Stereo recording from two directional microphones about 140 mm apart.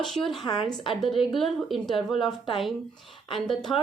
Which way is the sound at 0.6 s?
Centre (ahead or behind).